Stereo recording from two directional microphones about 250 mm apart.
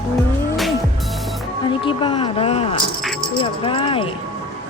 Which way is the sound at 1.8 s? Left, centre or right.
Centre.